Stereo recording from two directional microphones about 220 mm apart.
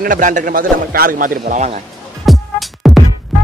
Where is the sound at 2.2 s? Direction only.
Centre (ahead or behind).